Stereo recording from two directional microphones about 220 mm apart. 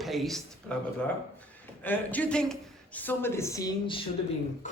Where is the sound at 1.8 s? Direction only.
10° left (ahead or behind).